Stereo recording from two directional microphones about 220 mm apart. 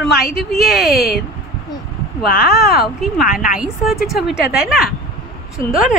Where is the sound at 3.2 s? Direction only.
40° left (ahead or behind).